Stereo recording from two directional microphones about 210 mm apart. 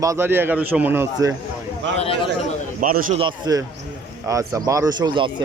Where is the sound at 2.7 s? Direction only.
40° right (ahead or behind).